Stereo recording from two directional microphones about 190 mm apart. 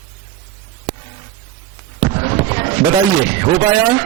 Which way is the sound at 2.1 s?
20° right (ahead or behind).